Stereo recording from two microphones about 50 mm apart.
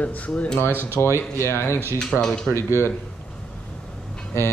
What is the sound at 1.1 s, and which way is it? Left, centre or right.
Speech, left.